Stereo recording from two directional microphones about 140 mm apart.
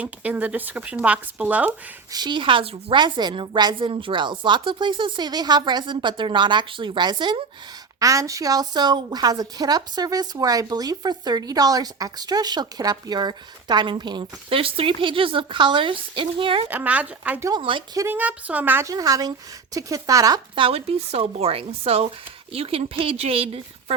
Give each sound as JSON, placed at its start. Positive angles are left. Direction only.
{"t": 0.0, "sound": "speech", "side_deg": -10}
{"t": 2.1, "sound": "a woman's voice", "side_deg": -35}
{"t": 16.6, "sound": "speech", "side_deg": -10}
{"t": 17.5, "sound": "a woman's voice", "side_deg": -35}
{"t": 17.9, "sound": "a woman's voice", "side_deg": -20}
{"t": 20.6, "sound": "speech", "side_deg": -40}